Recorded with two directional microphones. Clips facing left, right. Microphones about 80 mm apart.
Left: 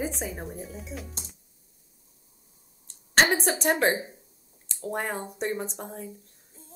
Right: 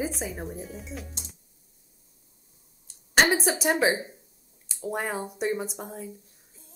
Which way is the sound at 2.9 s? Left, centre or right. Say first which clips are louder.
Even; centre.